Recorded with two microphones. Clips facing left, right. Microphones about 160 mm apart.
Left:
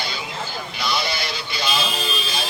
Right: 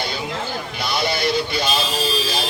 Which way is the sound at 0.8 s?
50° right (ahead or behind).